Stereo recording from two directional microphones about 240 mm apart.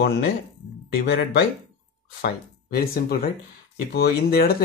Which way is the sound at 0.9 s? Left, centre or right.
Left.